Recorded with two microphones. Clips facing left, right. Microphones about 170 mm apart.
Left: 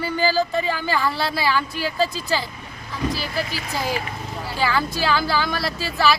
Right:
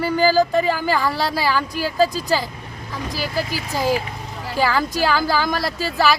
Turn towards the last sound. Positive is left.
turn(degrees=-40)  # may be behind; listen again after turning